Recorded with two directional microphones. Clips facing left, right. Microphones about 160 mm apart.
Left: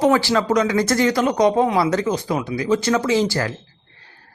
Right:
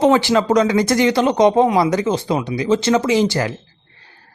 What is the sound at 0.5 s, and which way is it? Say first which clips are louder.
Speech: right 3 dB; 30° right (ahead or behind).